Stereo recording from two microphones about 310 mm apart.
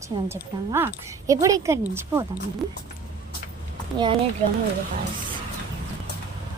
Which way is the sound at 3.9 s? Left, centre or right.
Centre.